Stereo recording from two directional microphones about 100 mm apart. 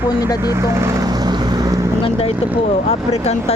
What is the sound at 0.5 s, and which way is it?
Vehicle, 30° right (ahead or behind).